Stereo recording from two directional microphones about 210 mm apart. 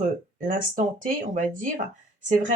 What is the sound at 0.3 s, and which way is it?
Speech, 40° right (ahead or behind).